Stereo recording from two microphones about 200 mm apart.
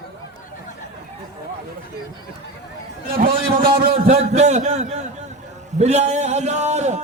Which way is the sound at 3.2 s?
25° right (ahead or behind).